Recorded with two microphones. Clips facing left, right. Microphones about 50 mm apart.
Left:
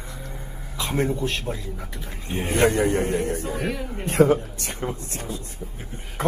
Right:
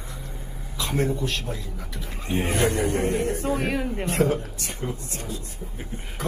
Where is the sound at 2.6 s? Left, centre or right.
Left.